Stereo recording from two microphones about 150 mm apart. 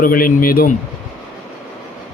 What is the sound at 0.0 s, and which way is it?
Speech, 70° left (ahead or behind).